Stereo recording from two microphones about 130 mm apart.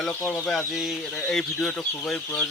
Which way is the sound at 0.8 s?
Centre (ahead or behind).